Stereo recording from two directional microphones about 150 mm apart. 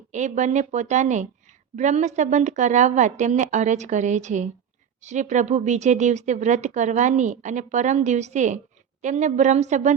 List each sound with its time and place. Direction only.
0.1 s speech: 55° right (ahead or behind)